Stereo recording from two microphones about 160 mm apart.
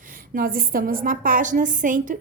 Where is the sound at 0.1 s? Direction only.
65° right (ahead or behind).